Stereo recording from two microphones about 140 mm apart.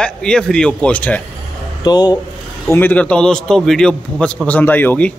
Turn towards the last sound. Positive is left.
turn(degrees=10)  # may be behind; listen again after turning